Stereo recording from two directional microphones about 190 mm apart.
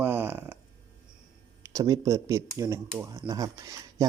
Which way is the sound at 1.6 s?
15° right (ahead or behind).